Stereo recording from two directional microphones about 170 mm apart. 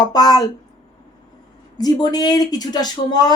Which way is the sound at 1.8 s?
25° left (ahead or behind).